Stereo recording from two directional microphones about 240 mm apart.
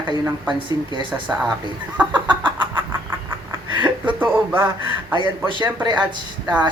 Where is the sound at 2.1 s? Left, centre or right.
Centre.